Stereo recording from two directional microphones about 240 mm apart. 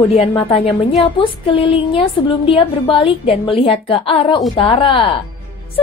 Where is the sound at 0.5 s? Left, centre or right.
Left.